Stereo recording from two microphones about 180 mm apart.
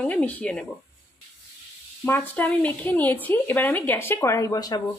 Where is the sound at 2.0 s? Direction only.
10° left (ahead or behind).